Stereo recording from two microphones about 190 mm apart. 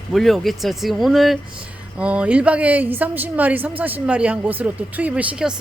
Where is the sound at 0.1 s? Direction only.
Centre (ahead or behind).